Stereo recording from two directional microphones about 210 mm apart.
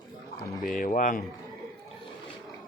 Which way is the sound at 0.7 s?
40° left (ahead or behind).